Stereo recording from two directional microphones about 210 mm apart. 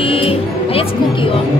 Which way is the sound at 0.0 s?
25° left (ahead or behind).